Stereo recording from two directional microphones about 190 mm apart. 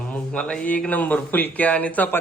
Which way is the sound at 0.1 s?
5° left (ahead or behind).